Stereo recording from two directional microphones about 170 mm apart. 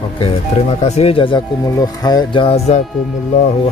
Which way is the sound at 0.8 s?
40° left (ahead or behind).